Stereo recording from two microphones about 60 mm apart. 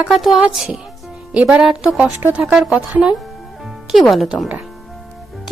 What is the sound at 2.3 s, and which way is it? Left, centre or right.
Speech, right.